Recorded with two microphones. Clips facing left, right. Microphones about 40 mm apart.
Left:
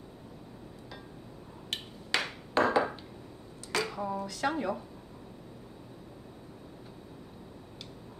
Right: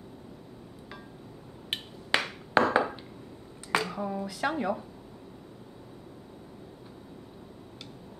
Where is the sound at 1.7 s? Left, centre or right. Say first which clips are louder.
Right 4 dB; right.